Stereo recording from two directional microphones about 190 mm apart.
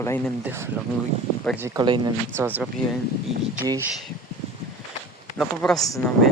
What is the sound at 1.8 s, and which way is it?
Speech, 25° right (ahead or behind).